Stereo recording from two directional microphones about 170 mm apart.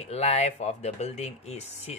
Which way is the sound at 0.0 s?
40° left (ahead or behind).